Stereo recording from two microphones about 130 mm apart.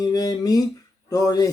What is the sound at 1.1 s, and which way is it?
Speech, 30° left (ahead or behind).